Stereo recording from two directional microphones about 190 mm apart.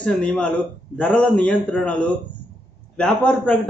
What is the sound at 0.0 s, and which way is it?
A man's voice, 5° left (ahead or behind).